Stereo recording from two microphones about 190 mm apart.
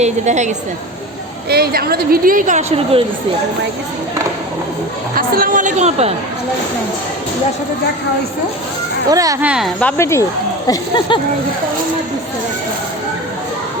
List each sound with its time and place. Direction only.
0.0 s a woman's voice: 40° right (ahead or behind)
1.5 s a woman's voice: 55° right (ahead or behind); by 3.0 s 35° right (ahead or behind)
5.1 s a woman's voice: 50° right (ahead or behind); by 6.1 s 35° right (ahead or behind)
9.0 s speech: 20° right (ahead or behind)
9.5 s speech: centre (ahead or behind)
10.0 s speech: 15° left (ahead or behind)